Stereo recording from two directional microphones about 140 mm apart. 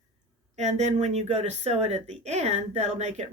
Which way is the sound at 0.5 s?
55° right (ahead or behind).